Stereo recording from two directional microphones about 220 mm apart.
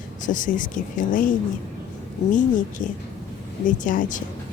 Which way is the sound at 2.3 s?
35° left (ahead or behind).